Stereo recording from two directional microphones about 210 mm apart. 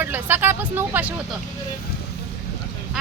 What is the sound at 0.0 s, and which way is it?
Speech, 10° right (ahead or behind).